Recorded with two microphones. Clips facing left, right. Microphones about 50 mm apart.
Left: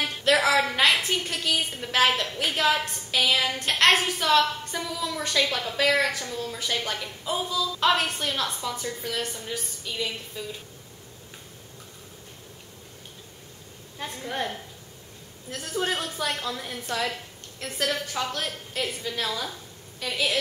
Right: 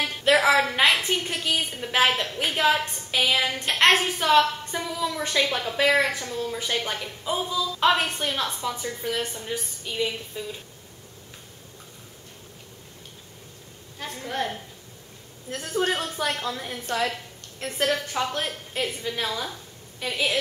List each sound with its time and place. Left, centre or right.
0.2 s a woman's voice: centre
15.6 s a woman's voice: centre